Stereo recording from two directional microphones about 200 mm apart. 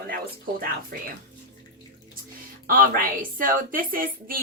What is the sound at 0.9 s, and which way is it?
Speech, 50° right (ahead or behind).